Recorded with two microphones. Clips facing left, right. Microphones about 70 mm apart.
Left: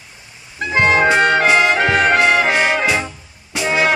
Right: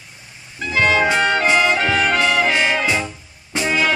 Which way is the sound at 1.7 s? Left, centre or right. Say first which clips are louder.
Left 3 dB; left.